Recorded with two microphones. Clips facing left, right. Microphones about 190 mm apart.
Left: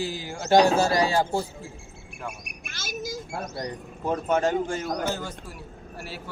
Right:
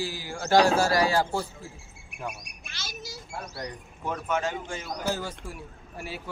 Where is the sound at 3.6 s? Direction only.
35° left (ahead or behind).